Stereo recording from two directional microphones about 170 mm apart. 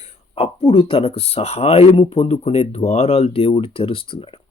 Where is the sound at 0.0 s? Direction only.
35° left (ahead or behind).